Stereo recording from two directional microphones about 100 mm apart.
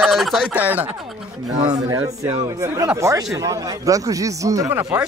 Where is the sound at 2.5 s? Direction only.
30° right (ahead or behind).